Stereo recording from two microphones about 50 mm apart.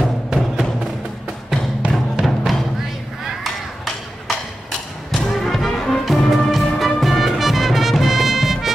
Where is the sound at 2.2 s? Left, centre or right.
Centre.